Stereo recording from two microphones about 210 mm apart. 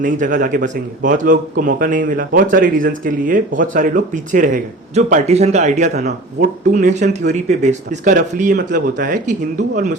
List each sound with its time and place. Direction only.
0.0 s a man's voice: 40° right (ahead or behind)